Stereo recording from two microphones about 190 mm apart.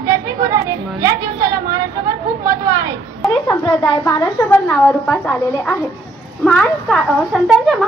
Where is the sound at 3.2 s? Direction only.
15° left (ahead or behind); by 7.9 s centre (ahead or behind).